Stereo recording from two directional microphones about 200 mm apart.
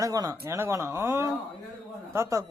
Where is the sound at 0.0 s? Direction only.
15° right (ahead or behind).